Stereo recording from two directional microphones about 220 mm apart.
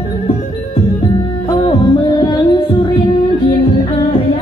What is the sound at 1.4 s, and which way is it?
Music, 20° left (ahead or behind).